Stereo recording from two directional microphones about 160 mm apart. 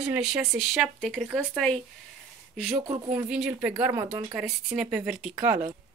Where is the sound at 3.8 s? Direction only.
15° right (ahead or behind).